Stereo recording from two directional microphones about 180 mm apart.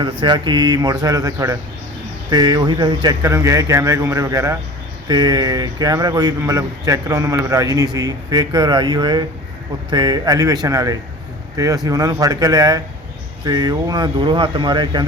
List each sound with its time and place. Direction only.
0.0 s a man's voice: 25° right (ahead or behind)